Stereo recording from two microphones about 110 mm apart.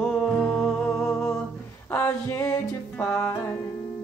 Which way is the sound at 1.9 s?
20° left (ahead or behind).